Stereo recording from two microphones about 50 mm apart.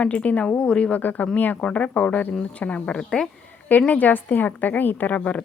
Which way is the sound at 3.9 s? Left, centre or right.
Left.